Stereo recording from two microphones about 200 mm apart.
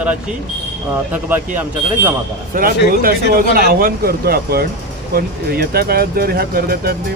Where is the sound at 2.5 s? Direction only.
45° right (ahead or behind).